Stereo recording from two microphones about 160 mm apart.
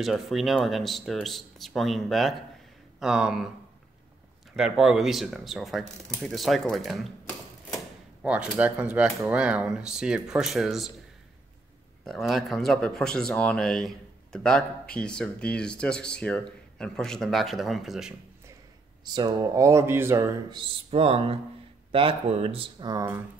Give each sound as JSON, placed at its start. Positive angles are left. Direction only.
{"t": 0.0, "sound": "speech", "side_deg": 0}
{"t": 4.6, "sound": "speech", "side_deg": -5}
{"t": 8.2, "sound": "speech", "side_deg": -10}
{"t": 12.0, "sound": "speech", "side_deg": 0}
{"t": 19.0, "sound": "a man's voice", "side_deg": -25}
{"t": 20.5, "sound": "speech", "side_deg": -35}